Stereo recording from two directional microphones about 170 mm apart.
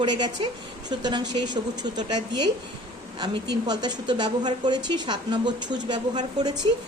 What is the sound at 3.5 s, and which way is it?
A woman's voice, 25° right (ahead or behind).